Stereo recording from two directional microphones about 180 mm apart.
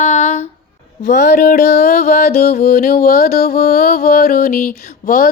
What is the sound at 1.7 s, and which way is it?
Child singing, 40° left (ahead or behind).